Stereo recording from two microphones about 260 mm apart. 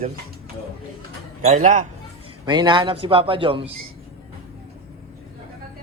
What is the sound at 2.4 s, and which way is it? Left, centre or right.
A man's voice, centre.